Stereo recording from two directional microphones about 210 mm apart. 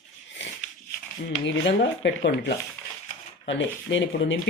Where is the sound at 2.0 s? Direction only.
55° left (ahead or behind).